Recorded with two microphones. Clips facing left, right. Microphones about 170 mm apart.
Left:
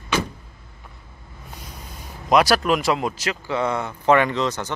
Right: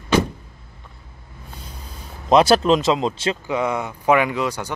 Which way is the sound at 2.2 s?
25° right (ahead or behind).